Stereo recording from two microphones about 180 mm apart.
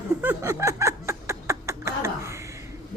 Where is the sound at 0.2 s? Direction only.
10° right (ahead or behind).